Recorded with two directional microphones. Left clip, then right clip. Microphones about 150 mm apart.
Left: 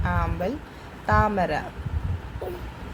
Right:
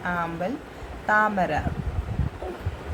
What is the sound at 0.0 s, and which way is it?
A woman's voice, 15° left (ahead or behind).